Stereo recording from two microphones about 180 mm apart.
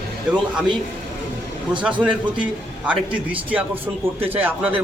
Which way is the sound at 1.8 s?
5° right (ahead or behind).